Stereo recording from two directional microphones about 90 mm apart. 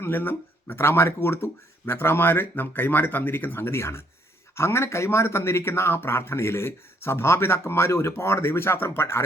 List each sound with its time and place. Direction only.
0.0 s speech: 25° left (ahead or behind)